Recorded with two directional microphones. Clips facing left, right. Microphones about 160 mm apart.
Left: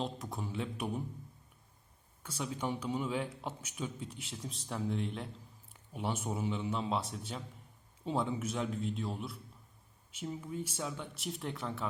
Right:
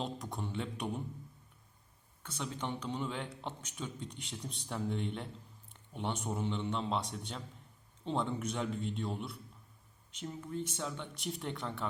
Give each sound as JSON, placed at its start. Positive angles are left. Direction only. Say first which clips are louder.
{"t": 0.0, "sound": "a man's voice", "louder": "left 1 dB", "side_deg": 0}
{"t": 2.4, "sound": "a man's voice", "louder": "left 2 dB", "side_deg": 10}